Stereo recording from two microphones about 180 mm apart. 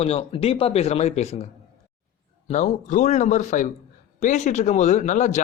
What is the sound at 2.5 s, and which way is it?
A man's voice, 40° left (ahead or behind).